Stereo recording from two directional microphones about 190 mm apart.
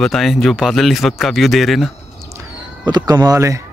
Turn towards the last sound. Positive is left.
turn(degrees=-15)  # may be behind; listen again after turning